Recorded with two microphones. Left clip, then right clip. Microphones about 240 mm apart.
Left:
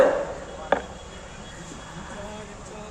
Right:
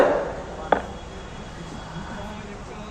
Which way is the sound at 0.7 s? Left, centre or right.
Left.